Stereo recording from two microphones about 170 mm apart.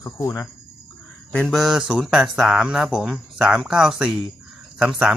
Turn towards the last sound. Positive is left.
turn(degrees=-5)  # may be behind; listen again after turning